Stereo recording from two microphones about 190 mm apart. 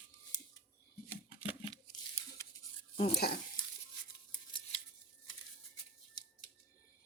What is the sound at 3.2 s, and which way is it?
Speech, 55° left (ahead or behind).